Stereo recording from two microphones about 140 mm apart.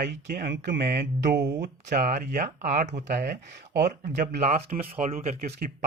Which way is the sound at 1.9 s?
70° right (ahead or behind).